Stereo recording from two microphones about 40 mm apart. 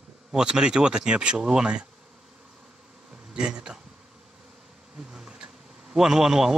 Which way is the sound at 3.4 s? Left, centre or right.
Right.